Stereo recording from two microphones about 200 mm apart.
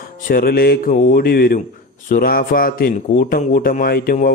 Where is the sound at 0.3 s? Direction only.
45° left (ahead or behind).